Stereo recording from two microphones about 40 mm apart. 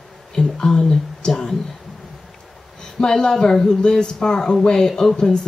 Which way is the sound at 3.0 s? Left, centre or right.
Centre.